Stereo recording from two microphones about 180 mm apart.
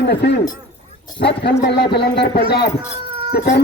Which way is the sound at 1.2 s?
70° left (ahead or behind).